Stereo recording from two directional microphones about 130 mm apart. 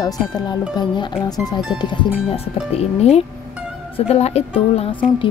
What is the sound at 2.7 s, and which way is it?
A woman's voice, 55° left (ahead or behind).